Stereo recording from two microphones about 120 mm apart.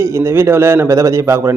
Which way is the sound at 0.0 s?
20° right (ahead or behind).